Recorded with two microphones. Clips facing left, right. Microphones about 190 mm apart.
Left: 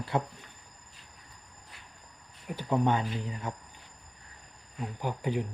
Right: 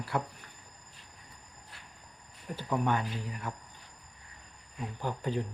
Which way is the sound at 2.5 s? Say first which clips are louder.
Left 3 dB; 20° left (ahead or behind).